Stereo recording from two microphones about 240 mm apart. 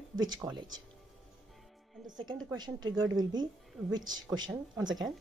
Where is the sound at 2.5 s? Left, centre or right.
Centre.